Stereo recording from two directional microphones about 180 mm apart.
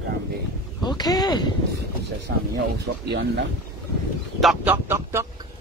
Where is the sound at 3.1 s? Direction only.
70° right (ahead or behind).